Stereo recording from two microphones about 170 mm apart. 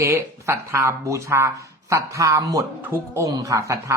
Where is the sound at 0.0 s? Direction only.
15° right (ahead or behind).